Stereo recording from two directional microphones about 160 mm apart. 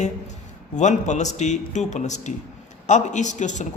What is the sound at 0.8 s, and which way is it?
A man's voice, 50° left (ahead or behind).